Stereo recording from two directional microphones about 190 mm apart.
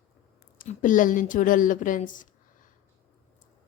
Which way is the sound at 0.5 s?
45° left (ahead or behind).